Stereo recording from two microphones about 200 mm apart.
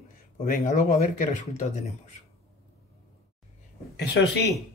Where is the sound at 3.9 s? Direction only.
55° left (ahead or behind).